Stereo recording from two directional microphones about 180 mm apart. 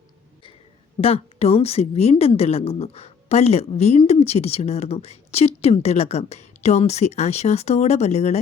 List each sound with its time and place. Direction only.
1.0 s a woman's voice: 35° left (ahead or behind)